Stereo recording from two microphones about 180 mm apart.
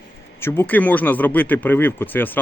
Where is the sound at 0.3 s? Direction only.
15° left (ahead or behind).